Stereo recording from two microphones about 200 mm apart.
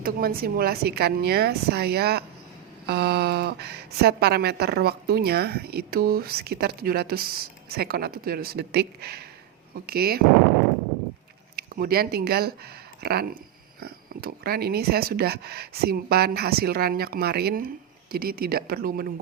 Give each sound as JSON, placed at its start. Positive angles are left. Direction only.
{"t": 0.0, "sound": "speech", "side_deg": -50}
{"t": 11.5, "sound": "speech", "side_deg": -50}